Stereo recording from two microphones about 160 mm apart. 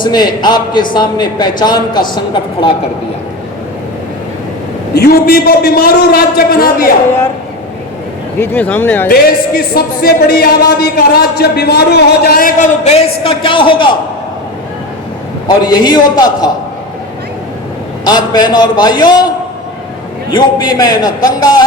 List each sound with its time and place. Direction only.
0.0 s a man's voice: 25° left (ahead or behind)
4.9 s a man's voice: 70° left (ahead or behind)
8.4 s speech: 15° left (ahead or behind)
9.0 s a man's voice: 70° left (ahead or behind)
12.8 s a man's voice: 40° left (ahead or behind)
15.4 s a man's voice: 30° left (ahead or behind)
18.0 s a man's voice: 25° left (ahead or behind)
20.3 s a man's voice: 25° left (ahead or behind)